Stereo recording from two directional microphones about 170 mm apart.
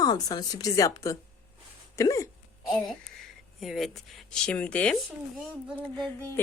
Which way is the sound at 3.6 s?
Centre (ahead or behind).